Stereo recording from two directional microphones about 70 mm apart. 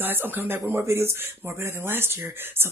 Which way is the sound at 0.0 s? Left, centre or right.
Right.